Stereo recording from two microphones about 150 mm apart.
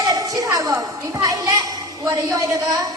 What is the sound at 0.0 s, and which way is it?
Music, 25° right (ahead or behind).